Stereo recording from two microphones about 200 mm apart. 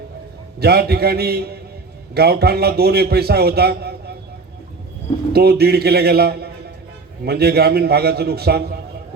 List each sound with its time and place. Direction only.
0.6 s a man's voice: 50° right (ahead or behind)
5.3 s a man's voice: 50° right (ahead or behind)